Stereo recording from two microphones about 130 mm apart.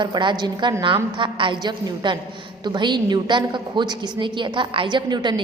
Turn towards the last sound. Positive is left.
turn(degrees=-35)  # may be behind; listen again after turning